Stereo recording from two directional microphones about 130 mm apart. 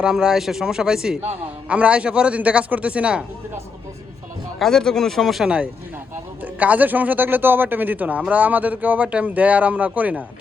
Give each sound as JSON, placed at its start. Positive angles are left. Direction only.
{"t": 0.0, "sound": "speech", "side_deg": -5}
{"t": 4.6, "sound": "speech", "side_deg": 5}